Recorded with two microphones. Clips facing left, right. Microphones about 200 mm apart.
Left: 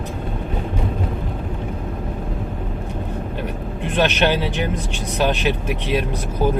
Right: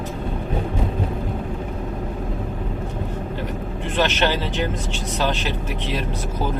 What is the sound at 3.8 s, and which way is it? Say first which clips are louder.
Speech: left 3 dB; 15° left (ahead or behind).